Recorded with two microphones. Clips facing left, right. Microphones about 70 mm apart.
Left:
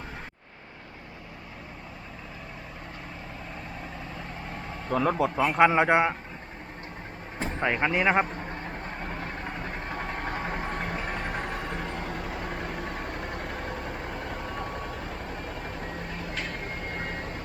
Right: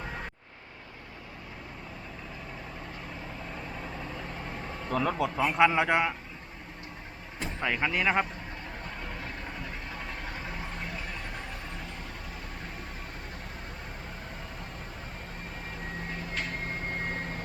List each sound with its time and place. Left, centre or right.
4.9 s speech: centre
5.1 s a man's voice: left
7.3 s speech: left
8.1 s vehicle: left